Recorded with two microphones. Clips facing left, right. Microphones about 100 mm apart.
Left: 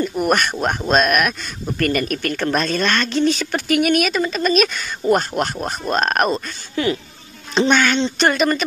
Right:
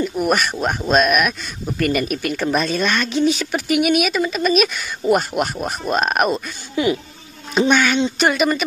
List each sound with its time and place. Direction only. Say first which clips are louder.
0.0 s speech: even; centre (ahead or behind)
6.7 s speech: right 2 dB; 15° right (ahead or behind)